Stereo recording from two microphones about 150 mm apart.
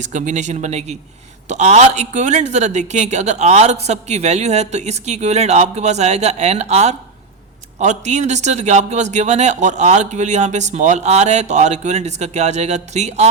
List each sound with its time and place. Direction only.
0.0 s speech: 55° right (ahead or behind)